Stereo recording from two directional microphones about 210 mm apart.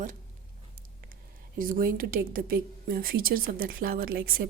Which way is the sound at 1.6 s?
40° right (ahead or behind).